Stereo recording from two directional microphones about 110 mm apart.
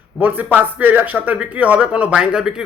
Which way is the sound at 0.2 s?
15° right (ahead or behind).